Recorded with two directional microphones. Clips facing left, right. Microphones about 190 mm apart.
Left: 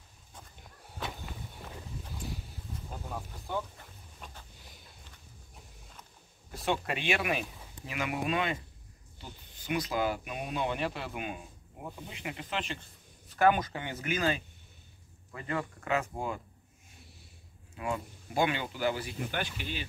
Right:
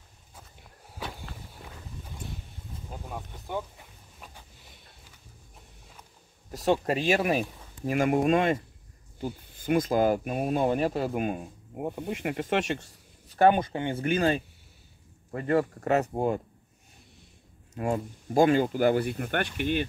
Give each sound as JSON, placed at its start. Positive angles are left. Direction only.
{"t": 0.3, "sound": "walk", "side_deg": -5}
{"t": 1.6, "sound": "a sound", "side_deg": 0}
{"t": 3.4, "sound": "a sound", "side_deg": -10}
{"t": 4.6, "sound": "sniff", "side_deg": 0}
{"t": 6.5, "sound": "speech", "side_deg": -40}
{"t": 13.4, "sound": "speech", "side_deg": -30}
{"t": 15.3, "sound": "speech", "side_deg": -45}
{"t": 17.7, "sound": "speech", "side_deg": -45}